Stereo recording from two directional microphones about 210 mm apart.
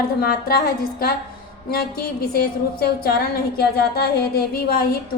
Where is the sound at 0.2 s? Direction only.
45° left (ahead or behind).